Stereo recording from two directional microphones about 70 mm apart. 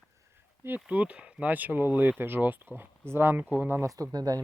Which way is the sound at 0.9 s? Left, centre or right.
Centre.